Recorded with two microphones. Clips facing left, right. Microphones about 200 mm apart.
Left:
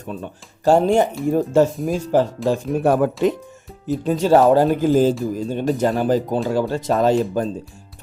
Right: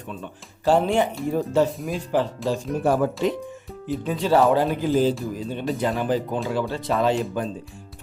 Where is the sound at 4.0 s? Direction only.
45° left (ahead or behind).